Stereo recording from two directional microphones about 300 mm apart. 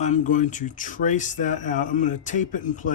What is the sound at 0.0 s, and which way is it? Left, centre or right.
Speech, left.